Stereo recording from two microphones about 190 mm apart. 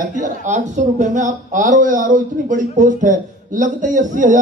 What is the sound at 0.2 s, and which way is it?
A man's voice, 40° right (ahead or behind).